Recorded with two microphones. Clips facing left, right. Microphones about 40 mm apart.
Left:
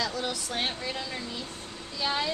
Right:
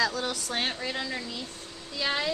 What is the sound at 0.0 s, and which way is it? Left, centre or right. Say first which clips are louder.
Speech: right 3 dB; right.